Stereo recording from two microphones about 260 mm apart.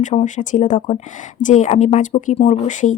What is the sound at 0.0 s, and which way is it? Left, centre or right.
Speech, left.